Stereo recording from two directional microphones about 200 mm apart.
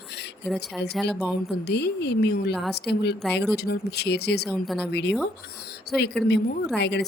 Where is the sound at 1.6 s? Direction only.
55° left (ahead or behind).